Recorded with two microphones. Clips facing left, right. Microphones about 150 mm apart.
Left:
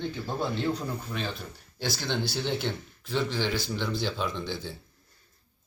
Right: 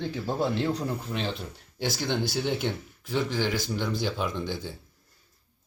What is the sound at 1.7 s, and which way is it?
Speech, 15° right (ahead or behind).